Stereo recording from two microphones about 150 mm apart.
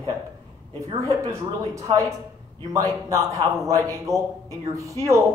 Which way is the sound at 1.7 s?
20° right (ahead or behind).